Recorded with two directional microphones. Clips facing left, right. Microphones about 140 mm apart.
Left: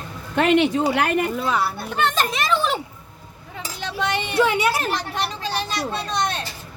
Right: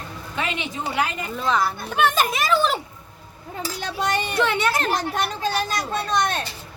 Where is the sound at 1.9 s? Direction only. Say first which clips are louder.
Right 2 dB; 10° right (ahead or behind).